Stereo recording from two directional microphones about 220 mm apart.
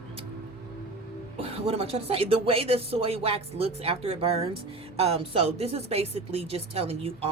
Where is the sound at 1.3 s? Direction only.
25° right (ahead or behind).